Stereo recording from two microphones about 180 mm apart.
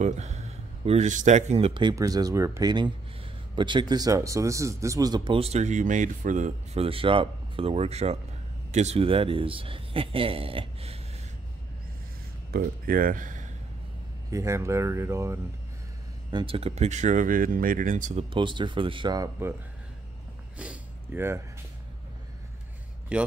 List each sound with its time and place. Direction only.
0.0 s speech: 40° right (ahead or behind)
12.4 s speech: 55° right (ahead or behind)
14.3 s speech: 15° right (ahead or behind)
16.3 s speech: 25° right (ahead or behind); by 18.2 s 45° right (ahead or behind)
18.3 s speech: 25° right (ahead or behind)
20.5 s a sound: 5° right (ahead or behind)
23.1 s speech: 5° right (ahead or behind)